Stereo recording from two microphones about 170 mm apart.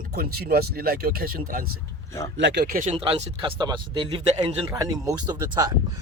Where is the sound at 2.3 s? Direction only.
85° right; by 2.9 s 55° right (ahead or behind).